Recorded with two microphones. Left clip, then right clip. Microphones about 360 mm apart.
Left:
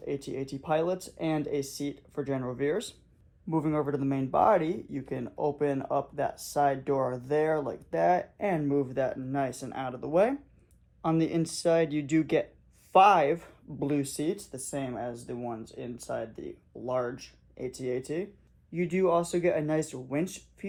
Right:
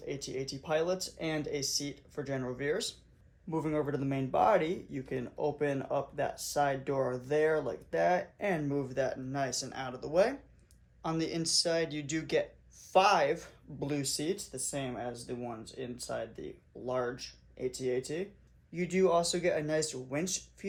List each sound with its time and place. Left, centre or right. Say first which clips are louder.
0.6 s speech: left 3 dB; centre